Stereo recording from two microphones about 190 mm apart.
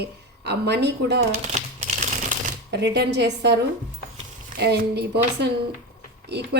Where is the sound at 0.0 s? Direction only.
60° right (ahead or behind).